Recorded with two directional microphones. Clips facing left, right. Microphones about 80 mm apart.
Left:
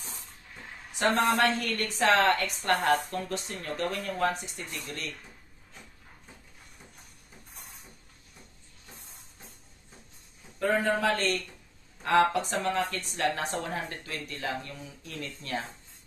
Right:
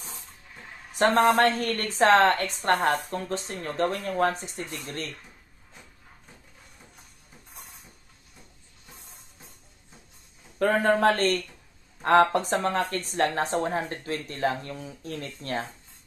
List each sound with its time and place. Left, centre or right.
0.9 s a woman's voice: right
10.6 s a woman's voice: right